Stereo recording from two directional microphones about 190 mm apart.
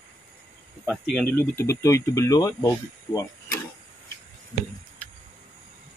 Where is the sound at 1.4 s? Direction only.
15° left (ahead or behind).